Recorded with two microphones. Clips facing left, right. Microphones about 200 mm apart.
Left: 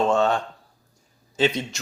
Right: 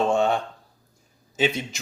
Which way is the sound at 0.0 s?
10° right (ahead or behind).